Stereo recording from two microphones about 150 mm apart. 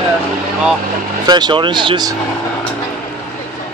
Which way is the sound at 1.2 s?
30° right (ahead or behind).